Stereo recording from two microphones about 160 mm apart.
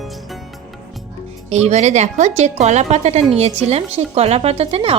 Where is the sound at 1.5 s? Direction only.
45° right (ahead or behind).